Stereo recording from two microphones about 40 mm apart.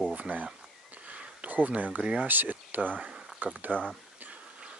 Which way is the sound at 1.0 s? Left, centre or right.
Right.